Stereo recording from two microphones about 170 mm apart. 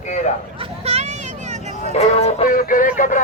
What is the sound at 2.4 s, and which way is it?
Music, 50° left (ahead or behind).